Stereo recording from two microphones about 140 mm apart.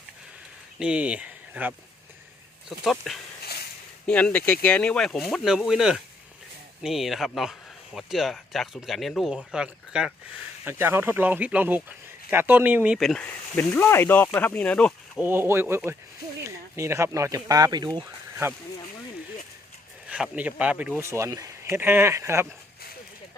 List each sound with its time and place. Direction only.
0.8 s speech: 10° right (ahead or behind)
13.0 s speech: centre (ahead or behind)
13.6 s speech: 15° left (ahead or behind)
15.2 s speech: 15° right (ahead or behind)
20.1 s speech: 10° right (ahead or behind)